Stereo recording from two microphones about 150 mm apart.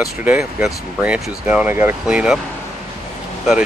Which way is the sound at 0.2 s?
10° right (ahead or behind).